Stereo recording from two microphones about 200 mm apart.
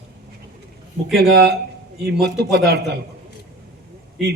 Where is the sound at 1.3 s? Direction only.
55° right (ahead or behind).